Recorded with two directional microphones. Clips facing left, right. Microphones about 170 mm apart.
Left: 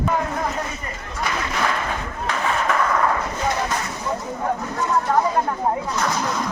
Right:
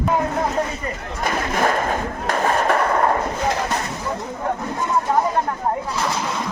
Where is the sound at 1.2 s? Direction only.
45° right (ahead or behind).